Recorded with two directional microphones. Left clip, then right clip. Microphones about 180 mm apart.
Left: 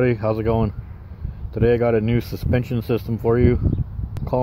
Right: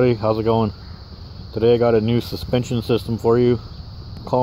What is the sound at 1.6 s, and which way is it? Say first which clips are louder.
Speech: right 3 dB; 25° left (ahead or behind).